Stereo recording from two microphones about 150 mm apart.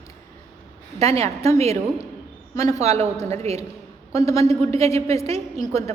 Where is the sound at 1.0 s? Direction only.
45° right (ahead or behind).